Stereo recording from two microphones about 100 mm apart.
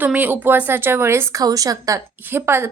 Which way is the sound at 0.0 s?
15° right (ahead or behind).